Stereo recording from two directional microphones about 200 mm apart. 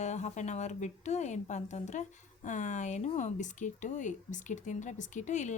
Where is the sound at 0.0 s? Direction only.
35° left (ahead or behind).